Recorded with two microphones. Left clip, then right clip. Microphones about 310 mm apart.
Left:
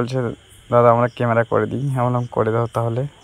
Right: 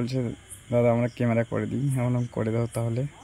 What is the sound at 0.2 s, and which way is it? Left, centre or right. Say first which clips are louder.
Speech: left 8 dB; left.